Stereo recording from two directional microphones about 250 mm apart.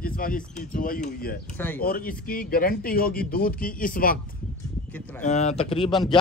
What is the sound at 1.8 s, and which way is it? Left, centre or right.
Speech, left.